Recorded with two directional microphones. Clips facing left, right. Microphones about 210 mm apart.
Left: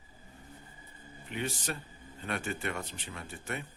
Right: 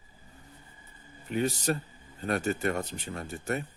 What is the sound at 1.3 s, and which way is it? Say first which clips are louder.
Speech: right 8 dB; 40° right (ahead or behind).